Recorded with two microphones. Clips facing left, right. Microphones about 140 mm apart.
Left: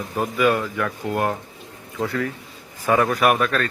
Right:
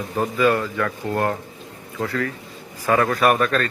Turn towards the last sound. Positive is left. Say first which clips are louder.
# right 1 dB
turn(degrees=5)  # may be behind; listen again after turning